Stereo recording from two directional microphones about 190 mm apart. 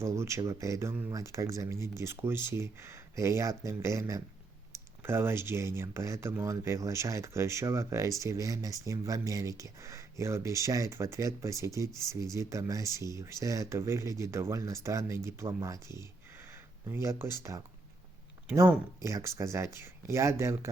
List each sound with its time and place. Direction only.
0.0 s speech: 15° right (ahead or behind)
19.0 s speech: 15° right (ahead or behind)